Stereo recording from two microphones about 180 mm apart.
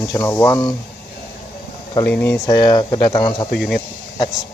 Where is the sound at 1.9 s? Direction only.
10° left (ahead or behind).